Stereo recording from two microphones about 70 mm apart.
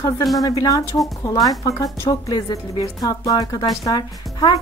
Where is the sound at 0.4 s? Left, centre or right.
Left.